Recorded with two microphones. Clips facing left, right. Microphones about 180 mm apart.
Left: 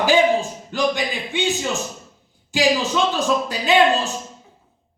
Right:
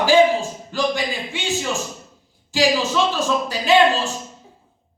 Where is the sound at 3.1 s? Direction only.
20° left (ahead or behind).